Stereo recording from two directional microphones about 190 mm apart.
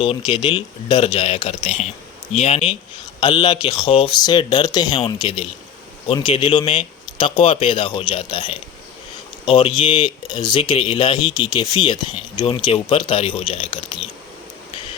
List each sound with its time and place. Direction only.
0.0 s speech: 30° left (ahead or behind)